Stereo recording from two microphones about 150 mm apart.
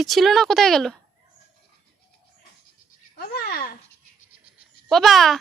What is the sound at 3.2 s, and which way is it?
Babbling, 85° left.